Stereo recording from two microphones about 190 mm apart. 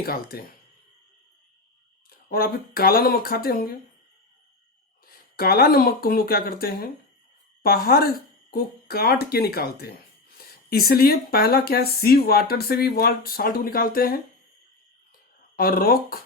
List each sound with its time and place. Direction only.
0.0 s speech: 50° left (ahead or behind)
2.0 s speech: 50° left (ahead or behind)
5.4 s speech: 55° left (ahead or behind)
15.5 s speech: 50° left (ahead or behind)